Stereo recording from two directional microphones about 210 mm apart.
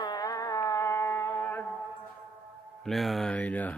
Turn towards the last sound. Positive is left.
turn(degrees=5)  # may be behind; listen again after turning